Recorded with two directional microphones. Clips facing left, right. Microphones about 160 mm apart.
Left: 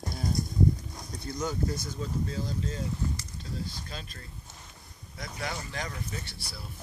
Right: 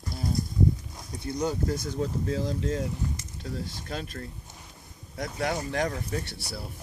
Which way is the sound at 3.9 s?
60° right (ahead or behind).